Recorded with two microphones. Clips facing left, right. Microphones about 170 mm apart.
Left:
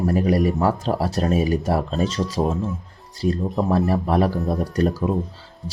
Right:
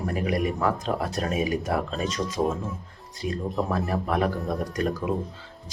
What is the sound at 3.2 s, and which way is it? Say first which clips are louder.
Speech: left 6 dB; 40° left (ahead or behind).